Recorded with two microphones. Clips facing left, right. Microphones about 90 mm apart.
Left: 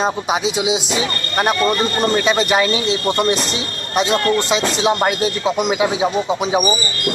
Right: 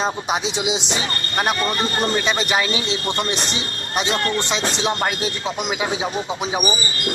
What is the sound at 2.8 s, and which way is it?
Speech, 45° left (ahead or behind).